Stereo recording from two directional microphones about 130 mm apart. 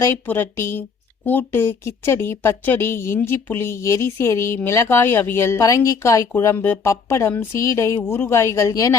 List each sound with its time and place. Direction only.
0.0 s speech: 15° left (ahead or behind)